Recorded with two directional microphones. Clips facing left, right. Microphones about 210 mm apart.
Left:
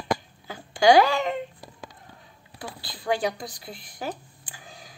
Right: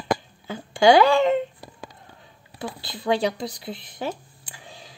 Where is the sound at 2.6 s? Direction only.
25° right (ahead or behind).